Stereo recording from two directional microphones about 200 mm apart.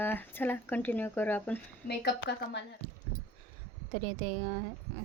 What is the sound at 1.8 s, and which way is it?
Speech, 55° left (ahead or behind).